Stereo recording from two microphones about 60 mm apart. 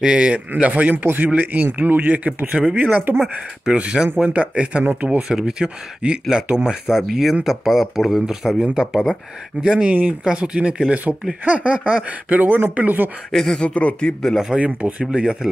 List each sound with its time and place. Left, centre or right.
0.0 s speech: centre
5.3 s speech: centre
11.4 s speech: right
13.3 s speech: centre
14.2 s speech: centre
14.8 s speech: centre